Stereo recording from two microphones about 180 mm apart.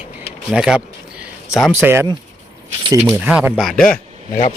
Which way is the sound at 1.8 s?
10° right (ahead or behind).